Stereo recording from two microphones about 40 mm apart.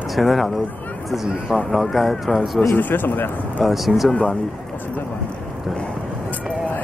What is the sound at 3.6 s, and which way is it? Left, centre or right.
Speech, centre.